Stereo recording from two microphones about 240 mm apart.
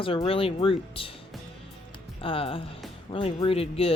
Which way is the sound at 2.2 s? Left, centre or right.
Left.